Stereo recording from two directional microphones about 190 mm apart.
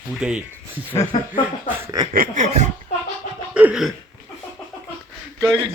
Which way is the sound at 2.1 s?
40° right (ahead or behind).